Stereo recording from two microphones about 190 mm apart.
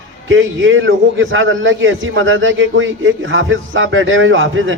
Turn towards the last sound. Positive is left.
turn(degrees=-90)